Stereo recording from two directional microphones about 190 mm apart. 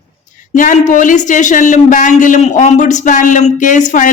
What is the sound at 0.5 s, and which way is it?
A man's voice, 40° left (ahead or behind).